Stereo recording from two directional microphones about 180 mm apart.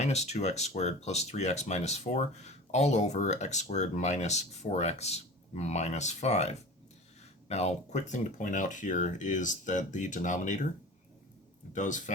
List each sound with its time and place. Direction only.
0.0 s speech: 35° left (ahead or behind)
11.7 s speech: 45° left (ahead or behind)